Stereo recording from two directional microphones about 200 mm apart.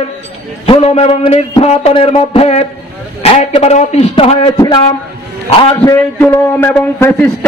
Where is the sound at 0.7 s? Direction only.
30° left (ahead or behind).